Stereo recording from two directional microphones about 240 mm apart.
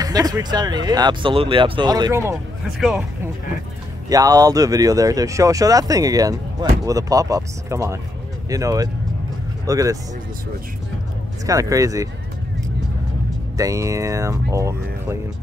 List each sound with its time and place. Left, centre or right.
0.0 s speech: centre
2.8 s speech: centre
4.1 s speech: centre
11.4 s speech: centre
13.6 s speech: centre